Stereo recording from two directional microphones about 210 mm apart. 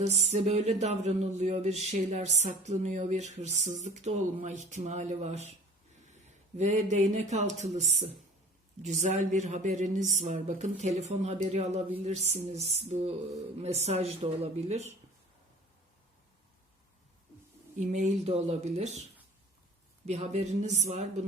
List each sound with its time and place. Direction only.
0.0 s speech: 30° right (ahead or behind)
6.6 s speech: 35° right (ahead or behind)
17.7 s speech: 35° right (ahead or behind)
20.1 s speech: 30° right (ahead or behind)